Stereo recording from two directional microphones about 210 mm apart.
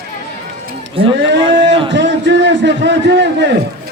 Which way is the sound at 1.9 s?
60° right (ahead or behind).